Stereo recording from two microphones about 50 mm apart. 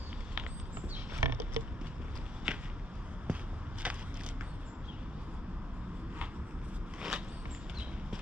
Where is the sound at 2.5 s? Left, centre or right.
Centre.